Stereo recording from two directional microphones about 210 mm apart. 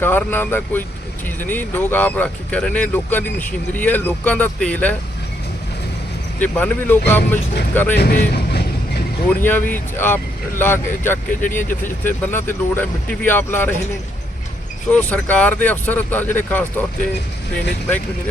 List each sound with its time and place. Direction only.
0.0 s speech: 10° left (ahead or behind)
6.4 s speech: 5° left (ahead or behind)
7.9 s speech: 45° left (ahead or behind)
9.4 s speech: 10° left (ahead or behind)
14.9 s speech: 5° left (ahead or behind)